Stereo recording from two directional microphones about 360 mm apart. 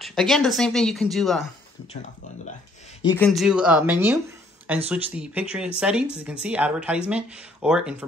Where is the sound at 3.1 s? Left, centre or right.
Centre.